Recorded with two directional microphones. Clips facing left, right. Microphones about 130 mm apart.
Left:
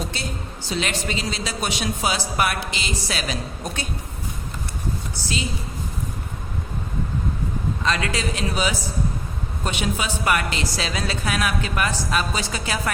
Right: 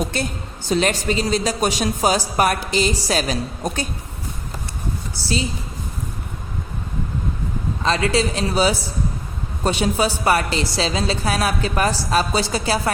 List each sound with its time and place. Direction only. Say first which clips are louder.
0.0 s a woman's voice: right 7 dB; 55° right (ahead or behind)
0.7 s a woman's voice: right 7 dB; 40° right (ahead or behind)
7.9 s a woman's voice: right 6 dB; 30° right (ahead or behind)